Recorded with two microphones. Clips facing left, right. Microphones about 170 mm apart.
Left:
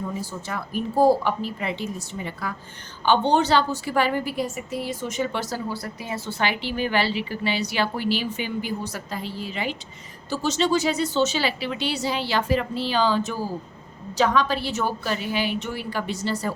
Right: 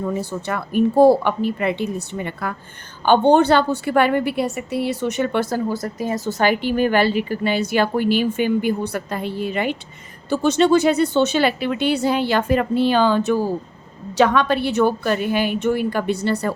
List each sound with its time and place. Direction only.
0.2 s a woman's voice: 65° right (ahead or behind)